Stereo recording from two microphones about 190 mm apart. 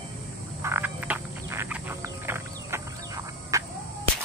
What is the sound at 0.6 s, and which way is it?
Frog, 10° right (ahead or behind).